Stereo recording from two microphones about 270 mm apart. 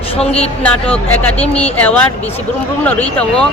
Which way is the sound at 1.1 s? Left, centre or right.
Centre.